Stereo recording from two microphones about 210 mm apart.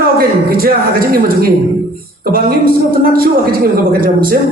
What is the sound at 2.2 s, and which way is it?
A woman's voice, 45° right (ahead or behind).